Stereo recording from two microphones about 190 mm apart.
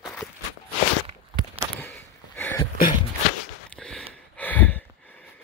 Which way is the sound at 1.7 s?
10° left (ahead or behind).